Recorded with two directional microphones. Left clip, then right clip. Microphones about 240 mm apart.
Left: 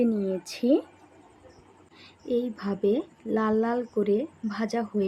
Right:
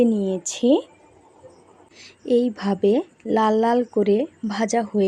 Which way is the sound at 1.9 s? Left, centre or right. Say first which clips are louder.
Right 8 dB; right.